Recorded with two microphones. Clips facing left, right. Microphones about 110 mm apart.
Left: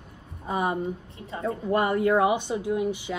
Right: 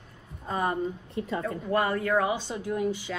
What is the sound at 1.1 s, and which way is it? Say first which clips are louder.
Speech: right 6 dB; 65° right (ahead or behind).